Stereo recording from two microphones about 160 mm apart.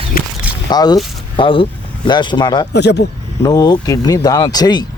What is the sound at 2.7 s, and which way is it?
Speech, 90° left.